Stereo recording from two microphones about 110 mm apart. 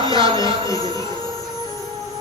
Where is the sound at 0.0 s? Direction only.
45° right (ahead or behind).